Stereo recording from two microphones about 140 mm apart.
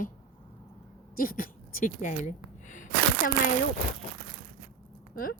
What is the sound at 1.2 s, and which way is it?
Speech, 90° left.